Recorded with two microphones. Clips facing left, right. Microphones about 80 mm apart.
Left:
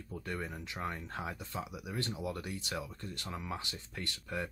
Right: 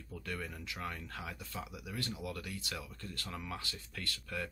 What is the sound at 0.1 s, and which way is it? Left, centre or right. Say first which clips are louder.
Speech: left 3 dB; left.